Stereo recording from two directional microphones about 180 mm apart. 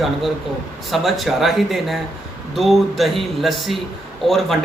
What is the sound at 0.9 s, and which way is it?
Speech, centre (ahead or behind).